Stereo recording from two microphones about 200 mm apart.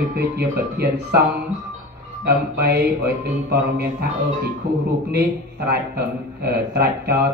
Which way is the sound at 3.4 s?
50° right (ahead or behind).